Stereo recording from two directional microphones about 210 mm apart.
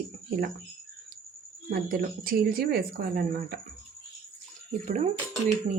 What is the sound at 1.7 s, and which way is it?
Speech, 45° right (ahead or behind).